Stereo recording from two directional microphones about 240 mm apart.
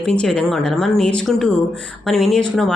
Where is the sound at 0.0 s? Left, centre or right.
Centre.